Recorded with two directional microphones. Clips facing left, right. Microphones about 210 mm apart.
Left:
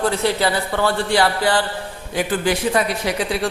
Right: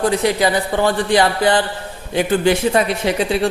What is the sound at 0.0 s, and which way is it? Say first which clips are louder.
A man's voice: right 3 dB; 15° right (ahead or behind).